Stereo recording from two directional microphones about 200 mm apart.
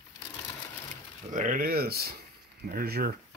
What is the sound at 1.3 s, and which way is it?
Speech, 40° right (ahead or behind).